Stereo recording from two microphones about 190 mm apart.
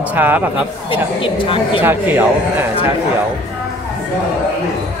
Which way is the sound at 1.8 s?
10° right (ahead or behind).